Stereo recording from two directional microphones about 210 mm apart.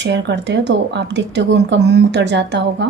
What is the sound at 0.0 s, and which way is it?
A woman's voice, 55° right (ahead or behind).